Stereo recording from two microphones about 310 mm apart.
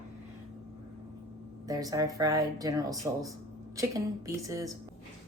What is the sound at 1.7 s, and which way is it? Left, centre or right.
Speech, centre.